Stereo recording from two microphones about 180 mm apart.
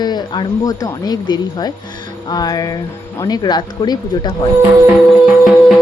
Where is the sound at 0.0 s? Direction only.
25° left (ahead or behind).